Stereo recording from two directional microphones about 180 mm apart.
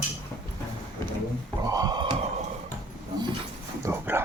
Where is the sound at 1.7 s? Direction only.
20° right (ahead or behind).